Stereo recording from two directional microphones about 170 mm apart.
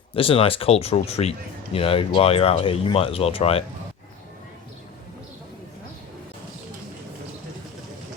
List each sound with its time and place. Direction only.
0.1 s speech: 35° left (ahead or behind)